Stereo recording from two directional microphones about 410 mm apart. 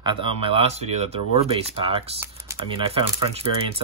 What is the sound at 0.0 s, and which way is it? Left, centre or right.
Speech, centre.